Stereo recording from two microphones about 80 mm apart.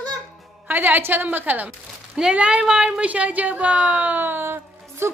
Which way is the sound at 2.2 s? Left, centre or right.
Centre.